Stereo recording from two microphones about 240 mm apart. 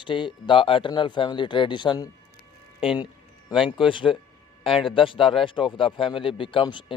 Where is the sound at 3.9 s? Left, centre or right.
Left.